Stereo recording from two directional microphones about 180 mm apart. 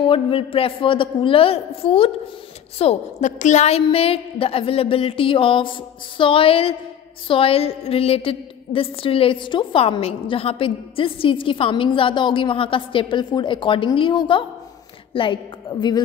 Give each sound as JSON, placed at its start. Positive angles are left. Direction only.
{"t": 0.0, "sound": "a woman's voice", "side_deg": 30}